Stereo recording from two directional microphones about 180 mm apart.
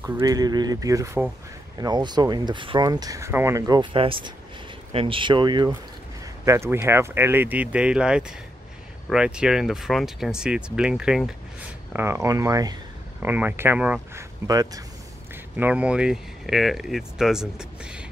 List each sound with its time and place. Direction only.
0.0 s speech: 20° right (ahead or behind)
6.4 s speech: 15° right (ahead or behind)
11.9 s speech: 15° right (ahead or behind)
14.5 s speech: 20° right (ahead or behind)
15.5 s speech: 10° right (ahead or behind)